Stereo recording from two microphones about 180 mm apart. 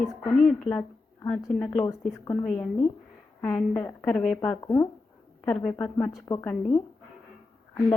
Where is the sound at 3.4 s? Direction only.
10° left (ahead or behind).